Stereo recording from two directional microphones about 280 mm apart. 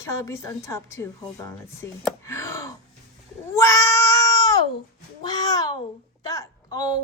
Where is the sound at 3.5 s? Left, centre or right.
Centre.